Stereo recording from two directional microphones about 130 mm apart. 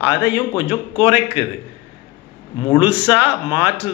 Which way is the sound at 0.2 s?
20° right (ahead or behind).